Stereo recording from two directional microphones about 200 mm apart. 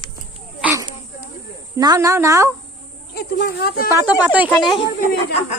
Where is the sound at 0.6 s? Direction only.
10° right (ahead or behind).